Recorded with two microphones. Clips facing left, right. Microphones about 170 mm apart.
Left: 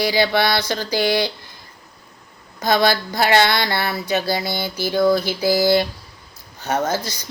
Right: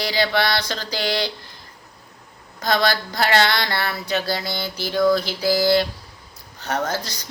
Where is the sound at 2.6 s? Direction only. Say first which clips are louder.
Left 3 dB; 10° left (ahead or behind).